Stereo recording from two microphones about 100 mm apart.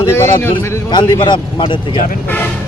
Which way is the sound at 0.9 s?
50° left (ahead or behind).